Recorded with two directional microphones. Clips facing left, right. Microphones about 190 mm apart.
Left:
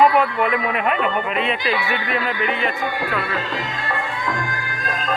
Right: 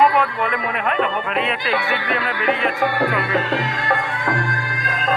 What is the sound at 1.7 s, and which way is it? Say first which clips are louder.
Speech: right 2 dB; 60° right (ahead or behind).